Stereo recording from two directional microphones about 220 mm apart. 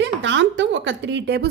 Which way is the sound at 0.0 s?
55° right (ahead or behind).